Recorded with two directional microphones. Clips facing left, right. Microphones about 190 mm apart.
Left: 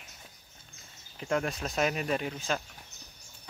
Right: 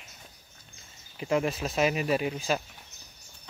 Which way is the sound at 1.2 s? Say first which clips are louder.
Right 4 dB; 5° right (ahead or behind).